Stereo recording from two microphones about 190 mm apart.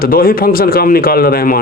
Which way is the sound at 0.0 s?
50° left (ahead or behind).